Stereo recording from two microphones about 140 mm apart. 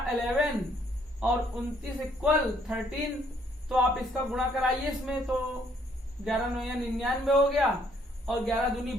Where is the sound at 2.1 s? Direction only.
5° right (ahead or behind).